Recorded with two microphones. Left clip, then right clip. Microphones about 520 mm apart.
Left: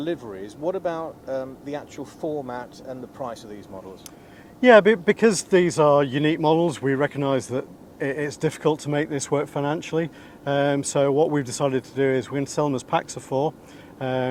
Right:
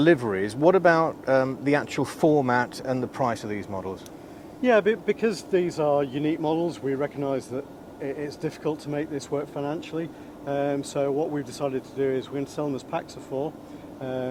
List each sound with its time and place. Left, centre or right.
0.0 s speech: right
4.6 s speech: left